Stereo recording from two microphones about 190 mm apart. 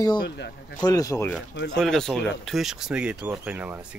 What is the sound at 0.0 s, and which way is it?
A man's voice, 20° left (ahead or behind).